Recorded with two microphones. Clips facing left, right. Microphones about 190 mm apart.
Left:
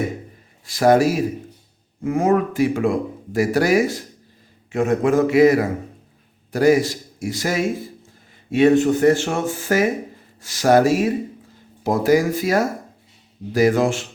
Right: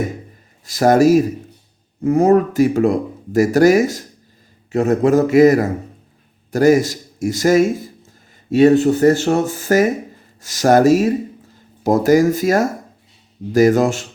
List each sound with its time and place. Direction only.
0.6 s a man's voice: 40° right (ahead or behind)